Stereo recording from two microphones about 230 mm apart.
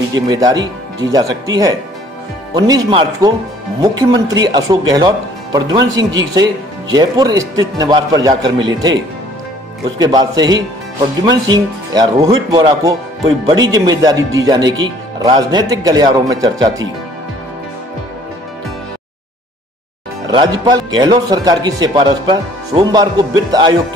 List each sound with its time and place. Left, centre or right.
0.1 s speech: centre
9.9 s speech: centre
20.2 s speech: centre